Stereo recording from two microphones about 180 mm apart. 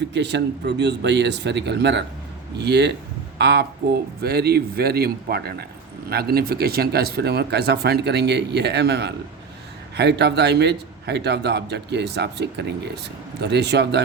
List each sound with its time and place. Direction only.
0.1 s a man's voice: 70° right (ahead or behind)